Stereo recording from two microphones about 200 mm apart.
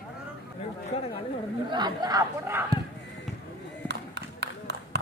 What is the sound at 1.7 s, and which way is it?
Speech, 20° right (ahead or behind).